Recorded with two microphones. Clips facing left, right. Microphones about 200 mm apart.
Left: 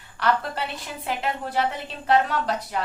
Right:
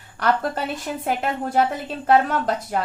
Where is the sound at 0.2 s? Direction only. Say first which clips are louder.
Right 3 dB; 45° right (ahead or behind).